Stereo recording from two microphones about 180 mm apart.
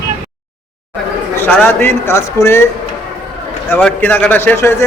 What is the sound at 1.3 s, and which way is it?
A man's voice, 10° left (ahead or behind).